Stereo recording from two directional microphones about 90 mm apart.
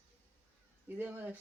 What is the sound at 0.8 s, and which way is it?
Speech, 20° right (ahead or behind).